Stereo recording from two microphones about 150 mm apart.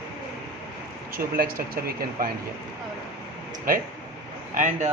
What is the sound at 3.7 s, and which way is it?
Speech, 65° right (ahead or behind).